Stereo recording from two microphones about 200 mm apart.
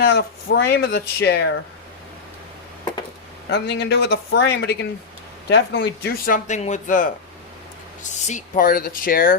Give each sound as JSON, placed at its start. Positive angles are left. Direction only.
{"t": 0.0, "sound": "speech", "side_deg": 55}
{"t": 3.5, "sound": "speech", "side_deg": 55}
{"t": 8.3, "sound": "speech", "side_deg": 40}